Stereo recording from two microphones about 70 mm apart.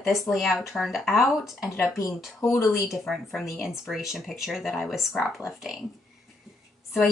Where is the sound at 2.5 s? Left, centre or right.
Left.